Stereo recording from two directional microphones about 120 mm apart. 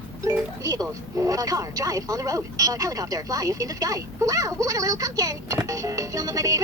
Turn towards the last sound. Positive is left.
turn(degrees=-30)  # may be behind; listen again after turning